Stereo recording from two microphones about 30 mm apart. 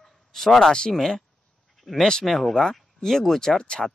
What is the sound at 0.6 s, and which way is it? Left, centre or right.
Speech, left.